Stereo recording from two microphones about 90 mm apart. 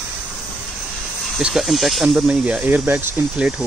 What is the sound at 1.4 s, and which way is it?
Speech, 5° right (ahead or behind).